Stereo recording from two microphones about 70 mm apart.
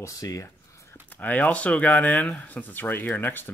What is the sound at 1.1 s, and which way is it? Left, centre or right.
Speech, left.